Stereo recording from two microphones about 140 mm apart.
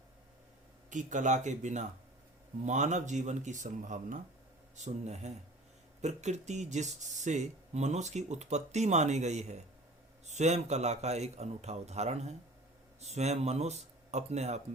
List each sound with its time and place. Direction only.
0.9 s speech: 60° right (ahead or behind)